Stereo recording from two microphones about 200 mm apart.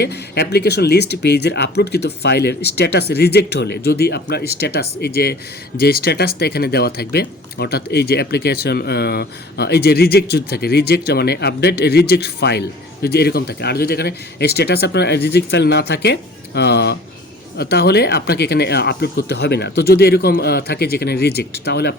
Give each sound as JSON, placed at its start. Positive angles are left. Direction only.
{"t": 0.0, "sound": "speech", "side_deg": 55}